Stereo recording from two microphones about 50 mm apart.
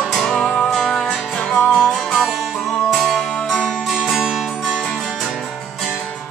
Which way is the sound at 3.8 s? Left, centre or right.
Centre.